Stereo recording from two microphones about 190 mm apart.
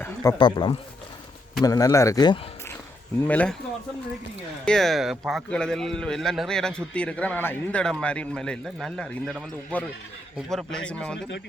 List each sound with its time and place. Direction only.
0.0 s speech: 15° left (ahead or behind)
3.2 s a man's voice: 5° left (ahead or behind)
4.6 s speech: centre (ahead or behind)